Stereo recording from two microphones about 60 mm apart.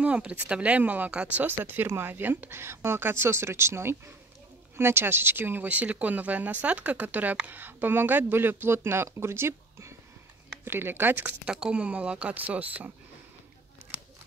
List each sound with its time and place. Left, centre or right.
0.0 s speech: right
1.6 s speech: right
5.7 s speech: right
11.2 s speech: centre